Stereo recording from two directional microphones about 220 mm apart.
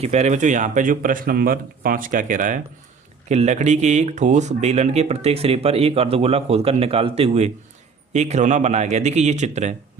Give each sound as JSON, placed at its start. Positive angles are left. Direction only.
{"t": 0.0, "sound": "speech", "side_deg": -30}